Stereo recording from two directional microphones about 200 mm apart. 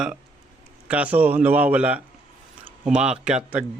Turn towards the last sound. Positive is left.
turn(degrees=-5)  # may be behind; listen again after turning